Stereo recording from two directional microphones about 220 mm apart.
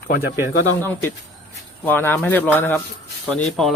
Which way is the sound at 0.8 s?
10° left (ahead or behind).